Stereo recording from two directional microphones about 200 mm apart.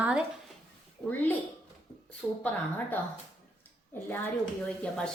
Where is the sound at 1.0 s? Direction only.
10° left (ahead or behind).